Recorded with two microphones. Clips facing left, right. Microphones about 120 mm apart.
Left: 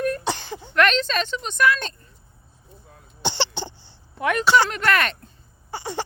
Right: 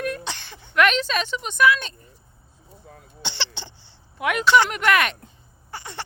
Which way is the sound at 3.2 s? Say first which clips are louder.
Left 8 dB; 45° left (ahead or behind).